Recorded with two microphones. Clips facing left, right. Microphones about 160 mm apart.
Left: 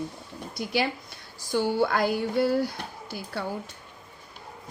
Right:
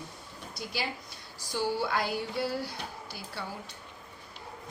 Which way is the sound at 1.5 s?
55° left (ahead or behind).